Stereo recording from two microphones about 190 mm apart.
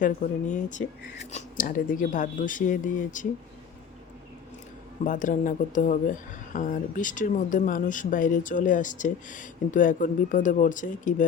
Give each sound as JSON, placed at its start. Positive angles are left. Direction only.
{"t": 0.0, "sound": "speech", "side_deg": 40}
{"t": 5.0, "sound": "speech", "side_deg": 45}